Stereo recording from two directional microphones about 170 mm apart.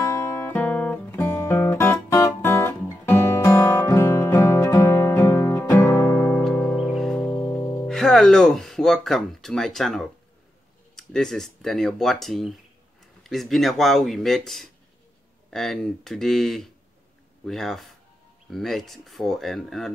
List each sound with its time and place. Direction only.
0.1 s guitar: 15° left (ahead or behind)
6.1 s music: 15° left (ahead or behind)
7.2 s music: 15° left (ahead or behind)
7.8 s speech: centre (ahead or behind)